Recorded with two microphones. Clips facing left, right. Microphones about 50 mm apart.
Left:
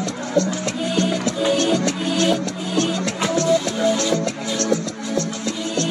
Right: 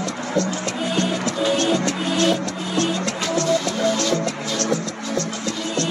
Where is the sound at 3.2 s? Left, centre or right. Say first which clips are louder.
Left 2 dB; centre.